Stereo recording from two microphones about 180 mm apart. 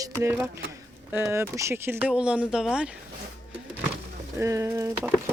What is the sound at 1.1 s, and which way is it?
Speech, 15° right (ahead or behind).